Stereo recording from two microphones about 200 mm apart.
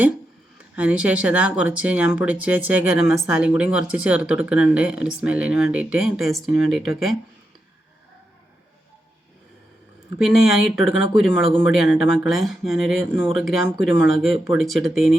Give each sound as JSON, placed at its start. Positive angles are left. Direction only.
{"t": 0.8, "sound": "speech", "side_deg": -5}
{"t": 10.2, "sound": "speech", "side_deg": 0}